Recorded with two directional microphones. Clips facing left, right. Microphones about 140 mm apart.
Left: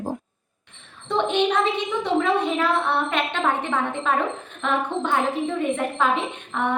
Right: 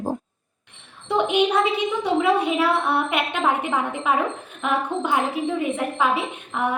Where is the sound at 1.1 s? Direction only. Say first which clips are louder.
Right 1 dB; 10° right (ahead or behind).